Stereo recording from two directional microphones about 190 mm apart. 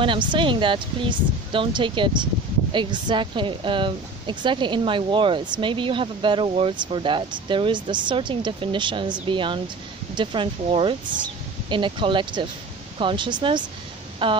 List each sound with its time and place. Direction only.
0.0 s speech: 25° right (ahead or behind)